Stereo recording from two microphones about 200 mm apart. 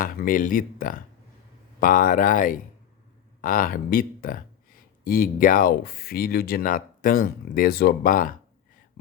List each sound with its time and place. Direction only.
0.0 s speech: 45° left (ahead or behind)